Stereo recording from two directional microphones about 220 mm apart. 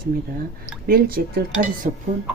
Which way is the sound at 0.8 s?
40° right (ahead or behind).